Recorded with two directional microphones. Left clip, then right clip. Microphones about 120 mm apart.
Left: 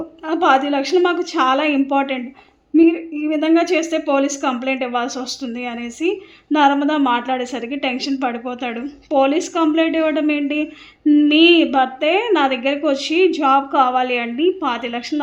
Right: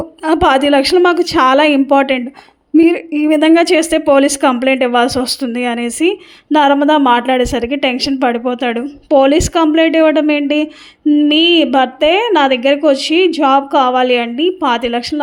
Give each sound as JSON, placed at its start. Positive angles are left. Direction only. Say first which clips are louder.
{"t": 0.3, "sound": "a woman's voice", "louder": "right 5 dB", "side_deg": -65}
{"t": 1.0, "sound": "a woman's voice", "louder": "right 6 dB", "side_deg": -55}
{"t": 4.6, "sound": "a woman's voice", "louder": "right 9 dB", "side_deg": -55}